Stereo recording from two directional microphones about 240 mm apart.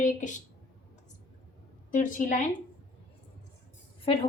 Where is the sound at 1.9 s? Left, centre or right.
Left.